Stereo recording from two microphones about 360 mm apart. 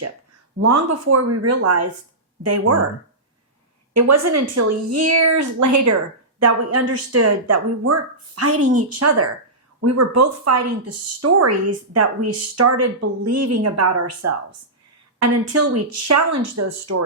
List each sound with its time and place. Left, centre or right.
0.7 s speech: right
3.9 s speech: right